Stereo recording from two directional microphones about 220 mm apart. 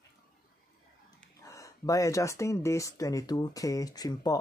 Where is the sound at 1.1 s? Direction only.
15° left (ahead or behind).